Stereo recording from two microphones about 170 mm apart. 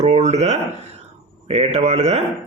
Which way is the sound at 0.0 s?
40° right (ahead or behind).